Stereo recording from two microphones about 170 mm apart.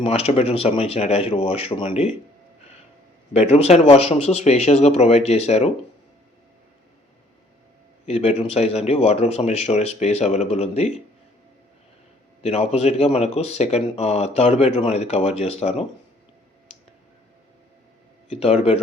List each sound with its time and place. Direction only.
0.0 s speech: 35° left (ahead or behind)
3.3 s speech: 40° left (ahead or behind)
8.0 s speech: 40° left (ahead or behind)
12.4 s speech: 40° left (ahead or behind)
18.3 s speech: 35° left (ahead or behind)